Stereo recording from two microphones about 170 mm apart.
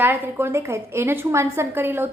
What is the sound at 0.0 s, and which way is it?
A woman's voice, 15° right (ahead or behind).